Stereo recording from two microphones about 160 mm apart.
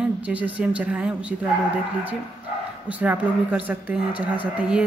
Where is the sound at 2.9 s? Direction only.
10° right (ahead or behind).